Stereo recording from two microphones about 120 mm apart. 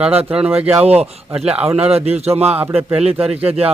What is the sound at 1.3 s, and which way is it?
Speech, 10° right (ahead or behind).